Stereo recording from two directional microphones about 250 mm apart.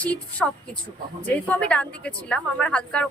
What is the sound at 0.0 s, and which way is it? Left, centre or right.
A woman's voice, centre.